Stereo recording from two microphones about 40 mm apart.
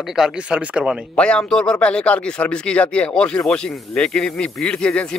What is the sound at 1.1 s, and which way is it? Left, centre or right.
Speech, left.